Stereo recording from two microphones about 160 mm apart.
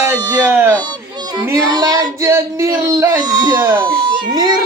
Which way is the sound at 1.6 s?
25° right (ahead or behind).